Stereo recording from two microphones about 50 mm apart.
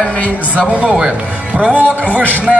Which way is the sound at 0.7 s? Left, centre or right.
Right.